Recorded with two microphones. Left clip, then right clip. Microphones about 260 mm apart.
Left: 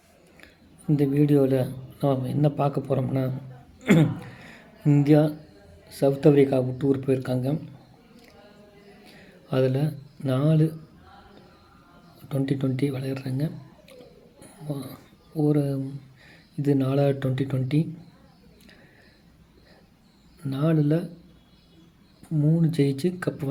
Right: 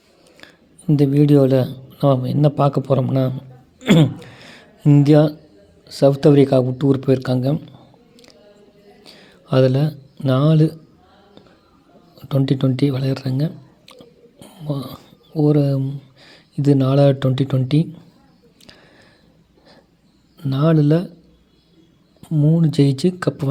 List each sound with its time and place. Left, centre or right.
0.3 s a man's voice: right
3.8 s a sound: right
5.9 s speech: right
9.0 s a sound: right
12.3 s speech: right
14.3 s a sound: right
16.2 s speech: right
20.4 s speech: right
22.2 s speech: centre